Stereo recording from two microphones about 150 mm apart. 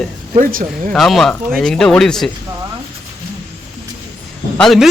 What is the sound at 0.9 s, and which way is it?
Speech, centre (ahead or behind).